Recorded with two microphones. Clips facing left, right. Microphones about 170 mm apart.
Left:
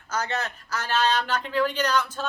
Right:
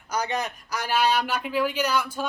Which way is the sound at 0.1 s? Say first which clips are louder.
Right 1 dB; 15° right (ahead or behind).